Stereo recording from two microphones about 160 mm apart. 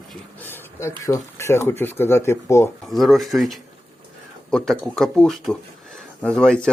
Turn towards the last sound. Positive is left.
turn(degrees=5)  # may be behind; listen again after turning